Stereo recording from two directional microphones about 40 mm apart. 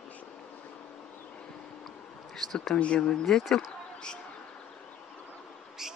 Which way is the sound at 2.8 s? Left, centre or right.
Left.